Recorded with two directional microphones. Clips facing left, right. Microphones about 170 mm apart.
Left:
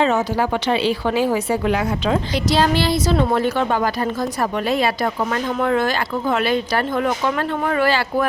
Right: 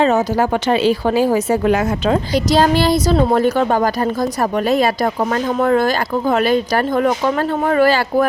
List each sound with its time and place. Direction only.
0.0 s a woman's voice: 45° right (ahead or behind)
5.5 s speech: 40° right (ahead or behind)